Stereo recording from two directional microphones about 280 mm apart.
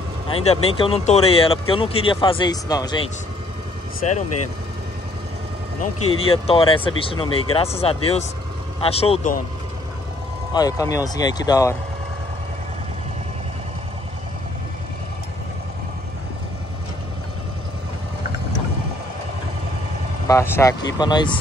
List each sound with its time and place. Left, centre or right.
0.3 s speech: centre
4.0 s speech: left
6.1 s speech: centre
10.5 s speech: centre
20.2 s speech: centre